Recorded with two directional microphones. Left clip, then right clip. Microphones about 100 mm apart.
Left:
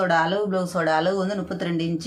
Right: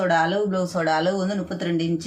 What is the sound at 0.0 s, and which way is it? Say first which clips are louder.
A woman's voice: even; 35° left (ahead or behind).